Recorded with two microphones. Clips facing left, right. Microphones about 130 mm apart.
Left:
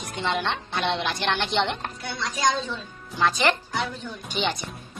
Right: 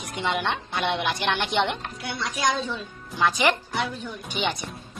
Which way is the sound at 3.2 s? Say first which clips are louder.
Even; 15° right (ahead or behind).